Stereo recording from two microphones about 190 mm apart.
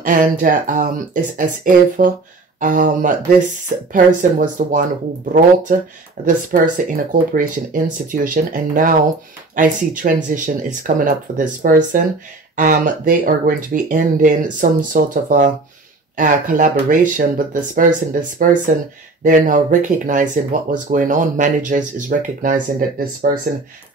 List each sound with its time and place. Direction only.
0.0 s speech: 45° right (ahead or behind)
6.2 s speech: 45° right (ahead or behind)